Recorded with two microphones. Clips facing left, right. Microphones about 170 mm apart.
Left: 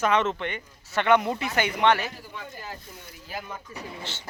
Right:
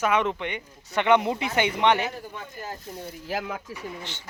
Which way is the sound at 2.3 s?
45° right (ahead or behind).